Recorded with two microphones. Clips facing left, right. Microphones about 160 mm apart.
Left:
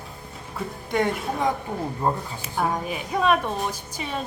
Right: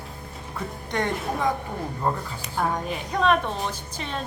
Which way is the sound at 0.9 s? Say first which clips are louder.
Left 2 dB; 5° left (ahead or behind).